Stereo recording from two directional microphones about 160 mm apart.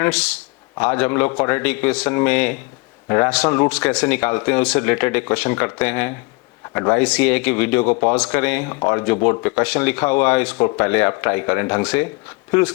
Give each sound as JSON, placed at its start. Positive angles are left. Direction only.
{"t": 0.0, "sound": "speech", "side_deg": 5}